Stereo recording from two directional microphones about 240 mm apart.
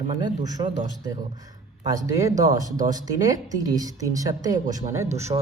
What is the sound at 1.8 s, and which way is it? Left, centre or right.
A woman's voice, centre.